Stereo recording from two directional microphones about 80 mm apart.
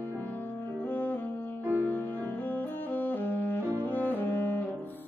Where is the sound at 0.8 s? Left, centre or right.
Left.